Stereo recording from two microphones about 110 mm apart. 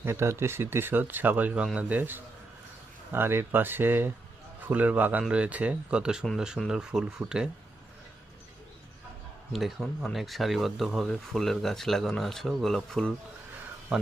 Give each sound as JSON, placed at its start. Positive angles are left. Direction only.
{"t": 0.0, "sound": "speech", "side_deg": -25}
{"t": 9.5, "sound": "speech", "side_deg": 0}